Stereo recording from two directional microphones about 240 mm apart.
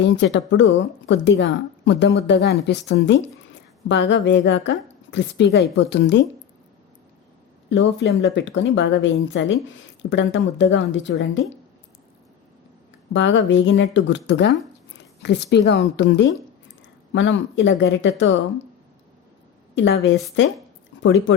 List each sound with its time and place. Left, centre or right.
0.0 s a woman's voice: left
7.7 s a woman's voice: left
13.1 s a woman's voice: left
19.7 s a woman's voice: left